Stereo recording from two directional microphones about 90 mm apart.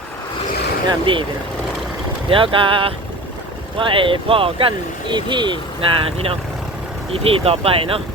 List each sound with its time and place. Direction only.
0.9 s speech: 70° right (ahead or behind)
2.3 s speech: 75° right (ahead or behind); by 8.0 s 90° right